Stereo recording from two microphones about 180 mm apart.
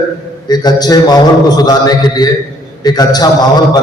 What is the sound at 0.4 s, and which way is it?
A man's voice, 20° left (ahead or behind).